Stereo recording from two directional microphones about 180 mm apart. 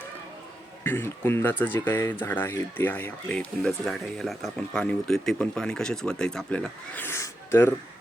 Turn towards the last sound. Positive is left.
turn(degrees=15)  # may be behind; listen again after turning